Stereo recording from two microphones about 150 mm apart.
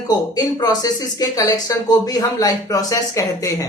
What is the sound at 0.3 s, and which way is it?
Speech, 25° left (ahead or behind).